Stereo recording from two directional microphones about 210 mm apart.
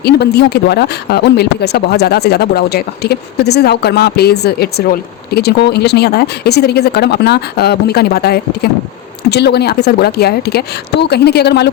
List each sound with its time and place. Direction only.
0.0 s speech: 50° left (ahead or behind)